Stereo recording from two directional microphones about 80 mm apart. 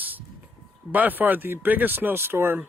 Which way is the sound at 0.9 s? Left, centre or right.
Right.